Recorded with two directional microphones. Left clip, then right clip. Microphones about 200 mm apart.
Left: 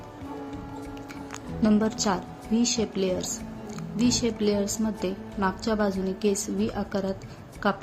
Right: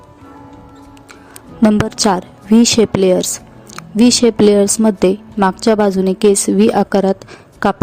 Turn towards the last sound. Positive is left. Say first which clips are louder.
# right 11 dB
turn(degrees=-60)  # may be behind; listen again after turning